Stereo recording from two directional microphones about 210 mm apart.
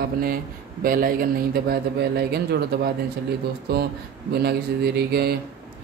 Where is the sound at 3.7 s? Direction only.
50° right (ahead or behind).